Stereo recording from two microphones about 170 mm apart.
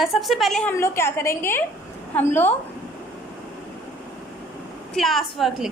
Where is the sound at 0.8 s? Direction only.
15° left (ahead or behind).